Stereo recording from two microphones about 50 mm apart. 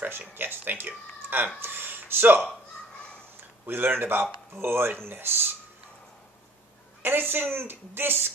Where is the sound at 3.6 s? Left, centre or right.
Right.